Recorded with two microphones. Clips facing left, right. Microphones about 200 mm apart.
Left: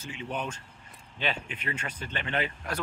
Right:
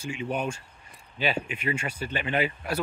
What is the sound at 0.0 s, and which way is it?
Speech, 10° right (ahead or behind).